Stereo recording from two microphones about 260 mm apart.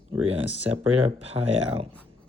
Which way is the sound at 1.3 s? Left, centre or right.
Centre.